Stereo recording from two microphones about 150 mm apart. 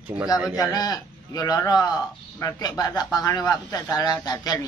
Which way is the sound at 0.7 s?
25° left (ahead or behind).